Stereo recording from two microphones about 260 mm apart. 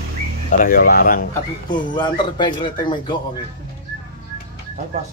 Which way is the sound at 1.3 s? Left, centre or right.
Centre.